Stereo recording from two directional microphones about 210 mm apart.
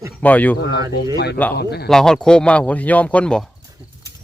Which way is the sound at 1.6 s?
50° left (ahead or behind).